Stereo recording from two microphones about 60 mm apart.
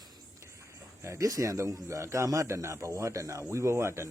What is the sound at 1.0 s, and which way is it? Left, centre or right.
A man's voice, right.